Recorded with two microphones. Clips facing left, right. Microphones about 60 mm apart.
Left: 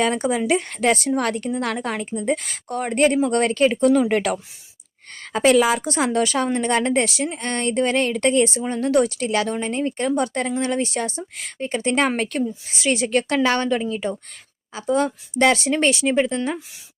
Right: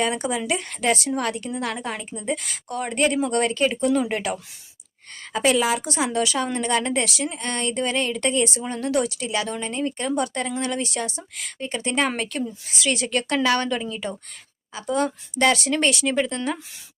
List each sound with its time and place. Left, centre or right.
0.2 s a woman's voice: left
2.0 s a woman's voice: left
5.2 s a woman's voice: left
12.6 s a woman's voice: left